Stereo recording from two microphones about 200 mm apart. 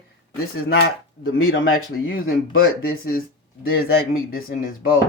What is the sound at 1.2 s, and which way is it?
Speech, 90° left.